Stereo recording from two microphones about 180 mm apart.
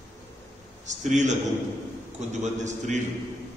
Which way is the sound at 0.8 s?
40° right (ahead or behind).